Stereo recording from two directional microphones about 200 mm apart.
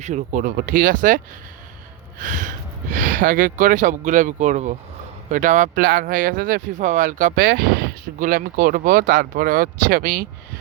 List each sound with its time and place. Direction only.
0.0 s speech: 35° right (ahead or behind)